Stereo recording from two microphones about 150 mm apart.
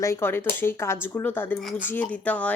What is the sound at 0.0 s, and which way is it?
A woman's voice, 15° left (ahead or behind).